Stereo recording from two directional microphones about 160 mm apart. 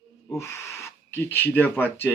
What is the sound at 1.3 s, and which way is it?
Speech, 10° left (ahead or behind).